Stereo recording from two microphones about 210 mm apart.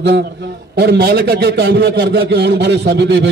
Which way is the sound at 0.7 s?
50° right (ahead or behind).